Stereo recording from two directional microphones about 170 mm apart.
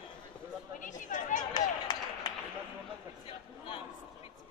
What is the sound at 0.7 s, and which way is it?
Speech, 50° left (ahead or behind).